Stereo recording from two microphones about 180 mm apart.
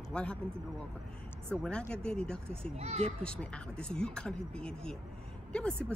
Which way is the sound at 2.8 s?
35° right (ahead or behind).